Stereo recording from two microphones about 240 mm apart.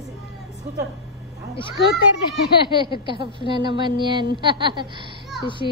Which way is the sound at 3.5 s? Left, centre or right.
Centre.